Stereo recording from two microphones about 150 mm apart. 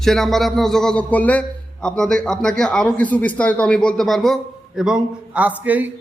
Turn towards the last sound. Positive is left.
turn(degrees=-10)  # may be behind; listen again after turning